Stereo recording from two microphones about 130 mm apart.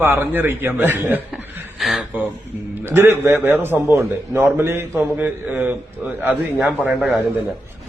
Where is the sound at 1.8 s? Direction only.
Centre (ahead or behind).